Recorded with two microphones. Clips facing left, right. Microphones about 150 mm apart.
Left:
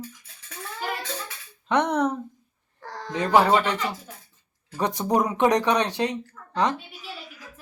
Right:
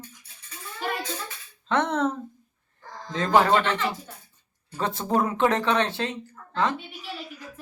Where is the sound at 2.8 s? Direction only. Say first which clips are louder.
Left 4 dB; 75° left (ahead or behind).